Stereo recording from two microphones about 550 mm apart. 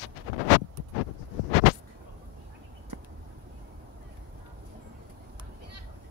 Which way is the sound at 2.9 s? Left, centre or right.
Right.